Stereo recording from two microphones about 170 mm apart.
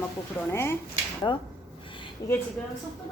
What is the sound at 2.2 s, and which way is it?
Speech, 70° left (ahead or behind).